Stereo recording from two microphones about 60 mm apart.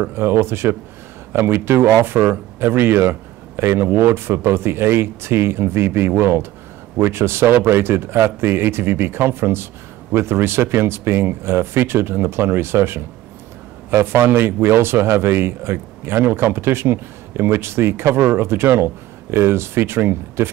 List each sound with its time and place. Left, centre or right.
0.0 s a man's voice: right